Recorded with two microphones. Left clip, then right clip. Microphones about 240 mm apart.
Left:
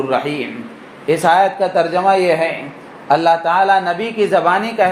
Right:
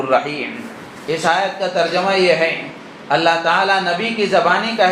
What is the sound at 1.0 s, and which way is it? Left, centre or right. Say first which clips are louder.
A man's voice: left 5 dB; left.